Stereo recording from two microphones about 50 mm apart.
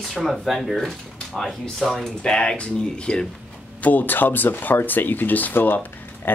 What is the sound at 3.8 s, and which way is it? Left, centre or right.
Speech, left.